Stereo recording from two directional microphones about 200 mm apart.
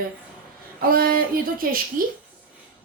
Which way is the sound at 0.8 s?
45° right (ahead or behind).